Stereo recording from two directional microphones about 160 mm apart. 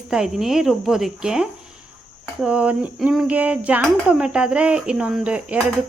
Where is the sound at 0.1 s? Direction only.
5° right (ahead or behind).